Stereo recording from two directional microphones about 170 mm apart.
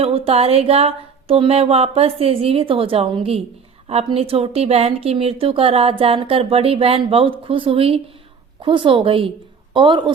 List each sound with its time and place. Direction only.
0.0 s a woman's voice: 35° right (ahead or behind)